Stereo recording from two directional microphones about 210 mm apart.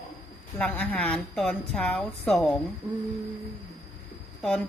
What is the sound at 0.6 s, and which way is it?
A woman's voice, 5° left (ahead or behind).